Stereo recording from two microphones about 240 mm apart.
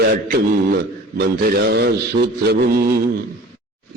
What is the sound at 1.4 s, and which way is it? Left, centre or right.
A man's voice, right.